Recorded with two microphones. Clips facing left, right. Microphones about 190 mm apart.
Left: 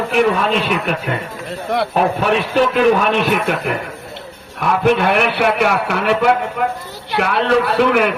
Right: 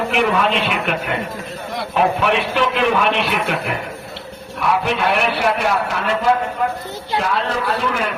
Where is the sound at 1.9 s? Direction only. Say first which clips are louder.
Right 1 dB; 40° left (ahead or behind).